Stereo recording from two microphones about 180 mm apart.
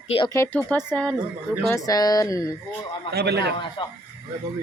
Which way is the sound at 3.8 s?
25° left (ahead or behind).